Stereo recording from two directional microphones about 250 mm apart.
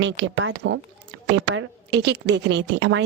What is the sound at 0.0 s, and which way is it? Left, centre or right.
A woman's voice, right.